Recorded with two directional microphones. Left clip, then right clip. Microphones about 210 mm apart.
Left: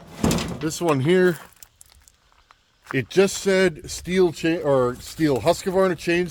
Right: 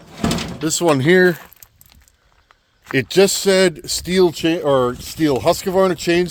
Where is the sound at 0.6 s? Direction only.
50° right (ahead or behind).